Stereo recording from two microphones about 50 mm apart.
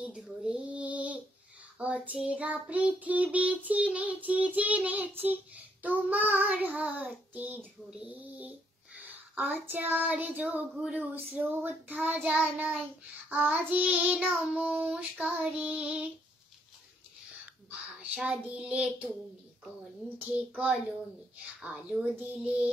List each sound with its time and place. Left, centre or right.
0.2 s child singing: centre
0.6 s female singing: right
1.8 s child singing: right
17.6 s a child's voice: right
20.3 s child singing: right